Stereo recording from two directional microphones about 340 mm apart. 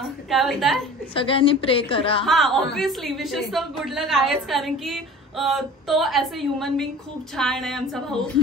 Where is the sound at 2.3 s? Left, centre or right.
Centre.